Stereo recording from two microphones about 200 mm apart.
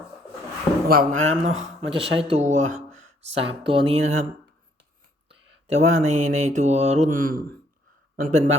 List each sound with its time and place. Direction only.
0.9 s mantra: 45° right (ahead or behind)
1.9 s speech: 25° right (ahead or behind)
2.3 s speech: 35° right (ahead or behind)
5.3 s mantra: 30° right (ahead or behind)
8.1 s speech: 40° right (ahead or behind)